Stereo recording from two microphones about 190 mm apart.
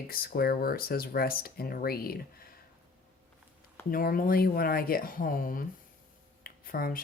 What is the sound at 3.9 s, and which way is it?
Speech, 50° left (ahead or behind).